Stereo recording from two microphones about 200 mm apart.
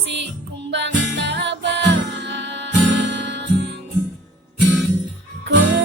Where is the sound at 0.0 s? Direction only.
60° right (ahead or behind).